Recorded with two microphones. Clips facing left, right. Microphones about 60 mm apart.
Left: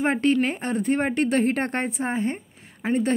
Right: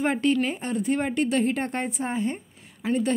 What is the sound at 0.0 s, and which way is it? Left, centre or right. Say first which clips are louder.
Speech: left 2 dB; left.